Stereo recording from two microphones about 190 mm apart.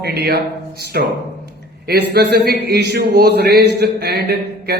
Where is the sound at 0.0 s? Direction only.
60° right (ahead or behind).